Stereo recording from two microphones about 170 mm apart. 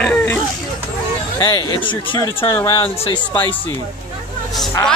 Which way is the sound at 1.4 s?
20° left (ahead or behind).